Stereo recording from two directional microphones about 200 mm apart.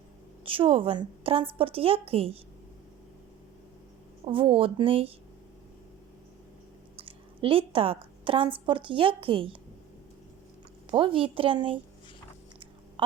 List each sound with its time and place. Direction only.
0.4 s a woman's voice: 25° right (ahead or behind)
4.3 s a woman's voice: 25° right (ahead or behind)
6.9 s a woman's voice: 25° right (ahead or behind)
10.9 s a woman's voice: 25° right (ahead or behind)